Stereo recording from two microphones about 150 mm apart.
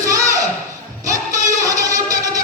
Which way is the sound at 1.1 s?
20° right (ahead or behind).